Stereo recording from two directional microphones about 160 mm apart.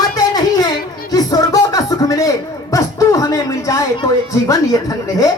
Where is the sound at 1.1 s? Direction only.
25° left (ahead or behind).